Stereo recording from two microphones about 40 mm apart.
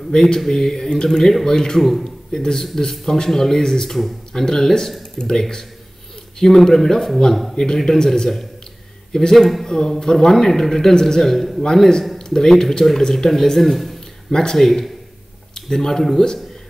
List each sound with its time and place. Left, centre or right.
0.1 s a man's voice: centre
1.8 s a man's voice: centre
2.3 s a man's voice: centre
9.7 s a man's voice: centre
11.6 s a man's voice: centre
14.3 s a man's voice: centre
14.6 s a man's voice: centre
16.0 s a man's voice: centre